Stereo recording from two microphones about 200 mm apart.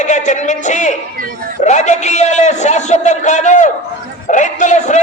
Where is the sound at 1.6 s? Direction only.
35° left (ahead or behind).